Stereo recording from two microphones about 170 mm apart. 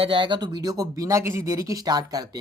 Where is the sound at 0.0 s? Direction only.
30° right (ahead or behind).